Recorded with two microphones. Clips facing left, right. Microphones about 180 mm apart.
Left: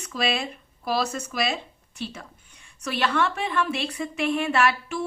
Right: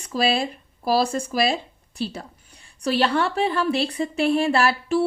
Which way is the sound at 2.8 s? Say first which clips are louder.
Right 4 dB; 35° right (ahead or behind).